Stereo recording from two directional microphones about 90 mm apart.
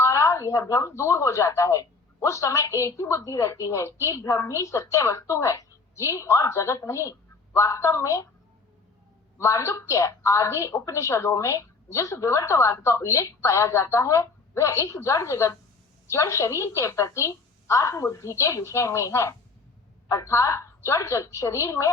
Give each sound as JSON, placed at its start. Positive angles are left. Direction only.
{"t": 0.0, "sound": "speech", "side_deg": 35}
{"t": 9.4, "sound": "speech", "side_deg": 35}